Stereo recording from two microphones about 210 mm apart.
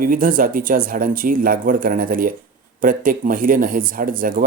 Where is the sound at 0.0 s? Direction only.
40° right (ahead or behind).